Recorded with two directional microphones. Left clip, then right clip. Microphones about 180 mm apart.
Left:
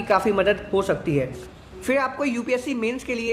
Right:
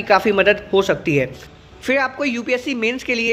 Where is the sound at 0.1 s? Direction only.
20° right (ahead or behind).